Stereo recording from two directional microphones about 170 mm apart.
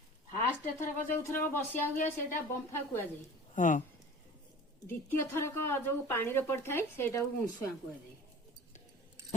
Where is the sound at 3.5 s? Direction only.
50° left (ahead or behind).